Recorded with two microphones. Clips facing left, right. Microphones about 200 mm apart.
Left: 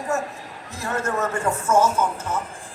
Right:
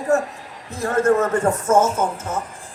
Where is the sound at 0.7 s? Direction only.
55° right (ahead or behind).